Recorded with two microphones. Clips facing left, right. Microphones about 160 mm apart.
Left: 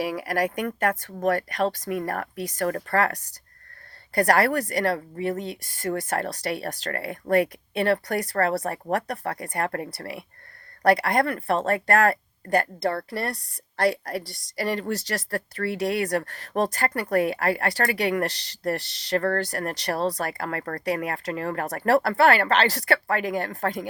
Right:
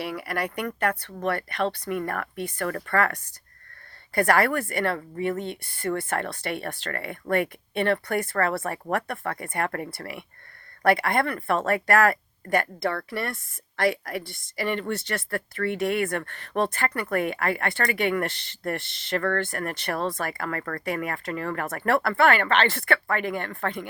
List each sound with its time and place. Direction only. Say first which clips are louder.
0.0 s speech: left 4 dB; 45° left (ahead or behind)